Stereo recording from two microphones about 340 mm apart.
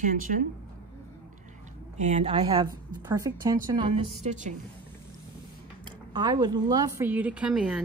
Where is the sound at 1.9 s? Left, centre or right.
Right.